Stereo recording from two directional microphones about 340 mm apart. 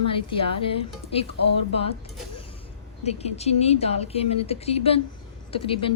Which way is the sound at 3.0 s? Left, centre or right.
Centre.